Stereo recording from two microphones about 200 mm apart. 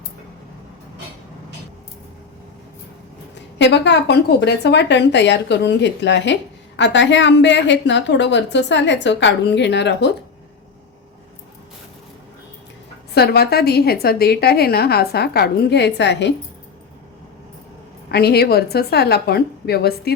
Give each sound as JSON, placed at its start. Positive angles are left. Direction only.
{"t": 3.6, "sound": "a woman's voice", "side_deg": 60}
{"t": 13.1, "sound": "a woman's voice", "side_deg": 55}
{"t": 18.1, "sound": "a woman's voice", "side_deg": 55}